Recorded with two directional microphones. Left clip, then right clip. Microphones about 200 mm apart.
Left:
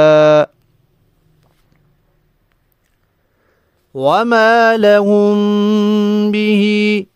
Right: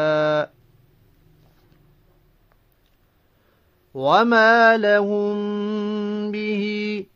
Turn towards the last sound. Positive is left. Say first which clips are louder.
# left 11 dB
turn(degrees=55)  # may be behind; listen again after turning